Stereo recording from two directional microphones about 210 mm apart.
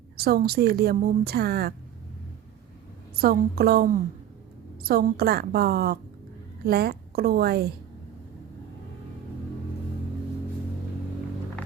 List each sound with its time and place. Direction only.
0.2 s a woman's voice: 45° right (ahead or behind)
3.2 s a woman's voice: 45° right (ahead or behind)